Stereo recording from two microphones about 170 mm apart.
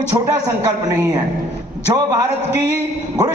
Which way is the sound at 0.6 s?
20° right (ahead or behind).